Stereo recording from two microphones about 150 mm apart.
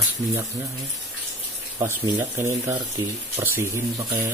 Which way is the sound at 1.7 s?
20° right (ahead or behind).